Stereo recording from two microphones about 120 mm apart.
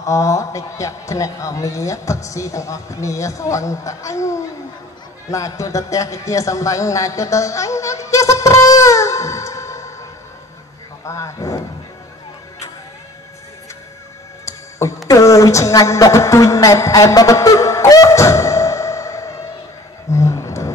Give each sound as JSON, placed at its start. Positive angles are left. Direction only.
{"t": 0.0, "sound": "a man's voice", "side_deg": 25}
{"t": 11.1, "sound": "a man's voice", "side_deg": 25}
{"t": 14.4, "sound": "music", "side_deg": 25}
{"t": 15.0, "sound": "a woman's voice", "side_deg": 25}
{"t": 20.1, "sound": "roaring cats", "side_deg": 25}